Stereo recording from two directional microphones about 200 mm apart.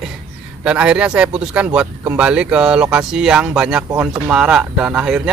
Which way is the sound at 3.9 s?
15° right (ahead or behind).